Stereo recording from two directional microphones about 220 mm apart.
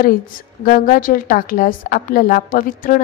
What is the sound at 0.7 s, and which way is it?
A woman's voice, 40° left (ahead or behind).